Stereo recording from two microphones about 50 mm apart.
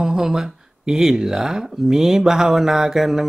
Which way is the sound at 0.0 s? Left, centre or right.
Centre.